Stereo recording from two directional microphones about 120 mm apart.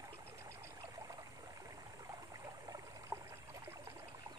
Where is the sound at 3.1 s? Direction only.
35° right (ahead or behind).